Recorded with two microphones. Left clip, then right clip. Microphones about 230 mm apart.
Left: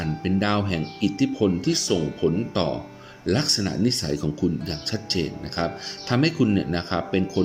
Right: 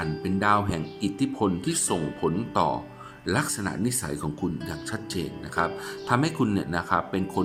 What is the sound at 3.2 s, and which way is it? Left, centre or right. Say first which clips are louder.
Speech: left 4 dB; centre.